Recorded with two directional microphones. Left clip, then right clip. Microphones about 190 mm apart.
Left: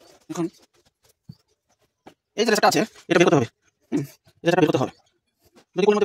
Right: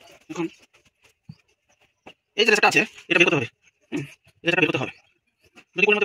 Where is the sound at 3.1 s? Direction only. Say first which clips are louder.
Left 4 dB; 75° left (ahead or behind).